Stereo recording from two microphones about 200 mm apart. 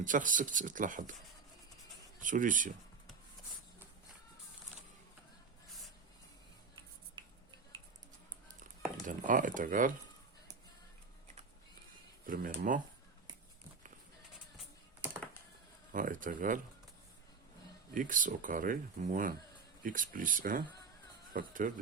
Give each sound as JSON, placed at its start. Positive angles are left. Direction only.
{"t": 0.0, "sound": "speech", "side_deg": -40}
{"t": 2.2, "sound": "speech", "side_deg": -40}
{"t": 9.0, "sound": "speech", "side_deg": -40}
{"t": 12.2, "sound": "speech", "side_deg": -45}
{"t": 15.9, "sound": "speech", "side_deg": -40}
{"t": 17.9, "sound": "speech", "side_deg": -40}